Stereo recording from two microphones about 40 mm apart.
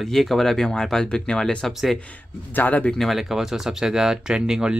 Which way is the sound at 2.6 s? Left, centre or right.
Left.